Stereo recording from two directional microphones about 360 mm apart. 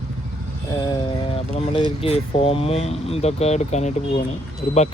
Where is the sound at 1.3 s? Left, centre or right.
Centre.